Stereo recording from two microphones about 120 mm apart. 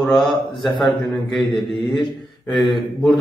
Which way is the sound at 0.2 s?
Centre (ahead or behind).